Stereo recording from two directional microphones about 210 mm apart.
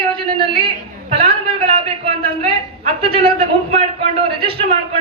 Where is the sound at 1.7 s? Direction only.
30° right (ahead or behind).